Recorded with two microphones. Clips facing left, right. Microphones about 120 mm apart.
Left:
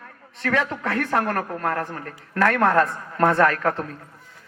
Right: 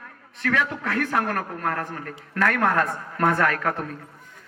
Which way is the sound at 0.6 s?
50° left (ahead or behind).